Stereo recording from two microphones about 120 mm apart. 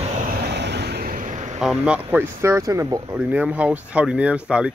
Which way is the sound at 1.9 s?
15° right (ahead or behind).